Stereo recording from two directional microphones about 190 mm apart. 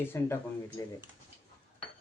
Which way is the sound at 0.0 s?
10° left (ahead or behind).